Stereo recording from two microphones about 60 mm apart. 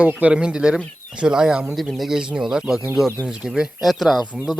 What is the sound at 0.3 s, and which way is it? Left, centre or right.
Speech, centre.